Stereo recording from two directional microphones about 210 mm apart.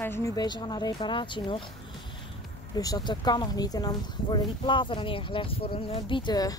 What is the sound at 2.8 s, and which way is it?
Speech, 20° left (ahead or behind).